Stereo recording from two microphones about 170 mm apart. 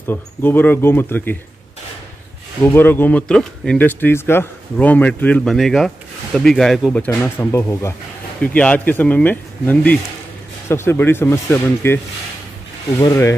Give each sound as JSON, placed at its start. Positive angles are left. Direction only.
{"t": 0.0, "sound": "speech", "side_deg": 15}
{"t": 2.6, "sound": "speech", "side_deg": 10}
{"t": 7.1, "sound": "speech", "side_deg": 15}
{"t": 13.0, "sound": "rub", "side_deg": 20}